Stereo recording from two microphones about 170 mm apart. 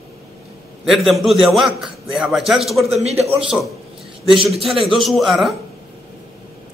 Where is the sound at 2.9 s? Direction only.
40° right (ahead or behind).